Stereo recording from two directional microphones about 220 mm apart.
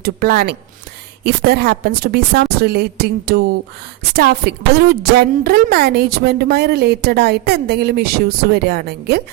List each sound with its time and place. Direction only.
0.0 s a woman's voice: 45° right (ahead or behind)